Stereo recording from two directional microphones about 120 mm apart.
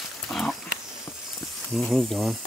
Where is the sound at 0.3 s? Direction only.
Centre (ahead or behind).